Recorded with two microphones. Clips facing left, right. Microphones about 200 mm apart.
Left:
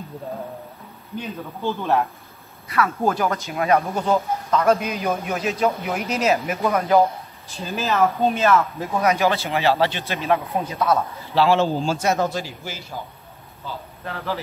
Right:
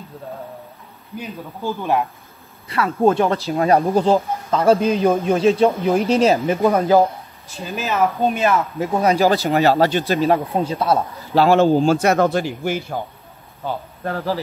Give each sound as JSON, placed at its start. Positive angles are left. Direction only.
{"t": 1.1, "sound": "speech", "side_deg": -10}
{"t": 2.7, "sound": "speech", "side_deg": -25}
{"t": 7.7, "sound": "speech", "side_deg": -10}
{"t": 9.0, "sound": "speech", "side_deg": -35}
{"t": 11.3, "sound": "a man's voice", "side_deg": -50}
{"t": 13.7, "sound": "speech", "side_deg": -45}